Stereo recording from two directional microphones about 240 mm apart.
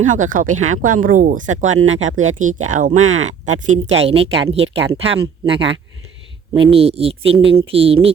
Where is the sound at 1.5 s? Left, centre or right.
Right.